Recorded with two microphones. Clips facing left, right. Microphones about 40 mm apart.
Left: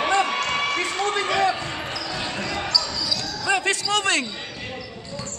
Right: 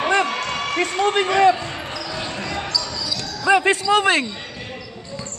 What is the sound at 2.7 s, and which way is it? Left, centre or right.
Basketball bounce, centre.